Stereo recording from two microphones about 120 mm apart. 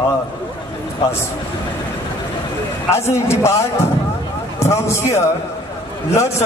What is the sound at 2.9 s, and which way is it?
A man's voice, 25° left (ahead or behind).